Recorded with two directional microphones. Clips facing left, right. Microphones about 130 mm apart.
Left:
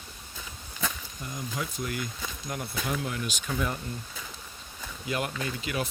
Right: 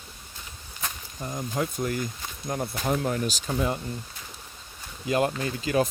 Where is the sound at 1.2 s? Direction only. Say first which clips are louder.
Right 6 dB; 40° right (ahead or behind).